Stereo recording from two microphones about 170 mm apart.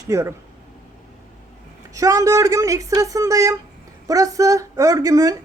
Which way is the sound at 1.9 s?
20° right (ahead or behind).